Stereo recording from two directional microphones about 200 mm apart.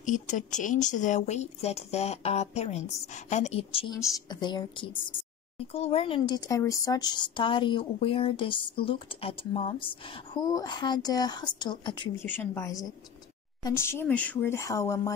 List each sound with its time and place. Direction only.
0.0 s a woman's voice: 40° left (ahead or behind); by 15.1 s 15° left (ahead or behind)